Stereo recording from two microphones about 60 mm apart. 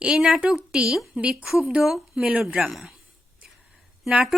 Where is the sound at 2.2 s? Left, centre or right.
Centre.